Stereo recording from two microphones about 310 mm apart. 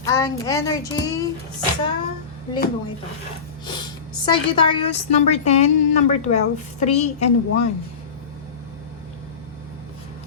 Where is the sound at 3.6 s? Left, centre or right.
Centre.